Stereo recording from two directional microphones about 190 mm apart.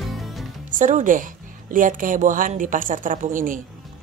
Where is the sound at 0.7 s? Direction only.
40° right (ahead or behind).